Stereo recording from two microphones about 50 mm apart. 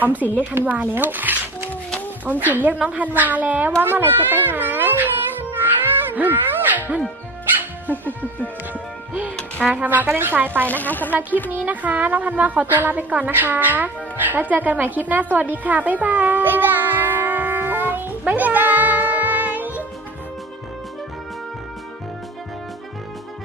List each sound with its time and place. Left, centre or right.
0.0 s speech: right
0.9 s speech: right
3.8 s speech: right
6.1 s a sound: right
8.0 s a woman's voice: left
9.7 s speech: right
10.7 s a woman's voice: left
11.6 s speech: right
13.3 s speech: right
15.5 s music: right